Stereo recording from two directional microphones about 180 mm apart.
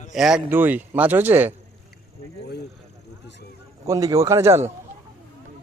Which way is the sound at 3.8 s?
20° right (ahead or behind).